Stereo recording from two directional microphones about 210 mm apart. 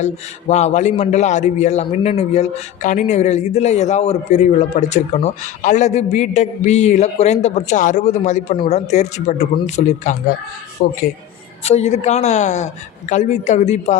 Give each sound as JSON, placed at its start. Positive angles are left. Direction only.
{"t": 0.0, "sound": "a man's voice", "side_deg": 35}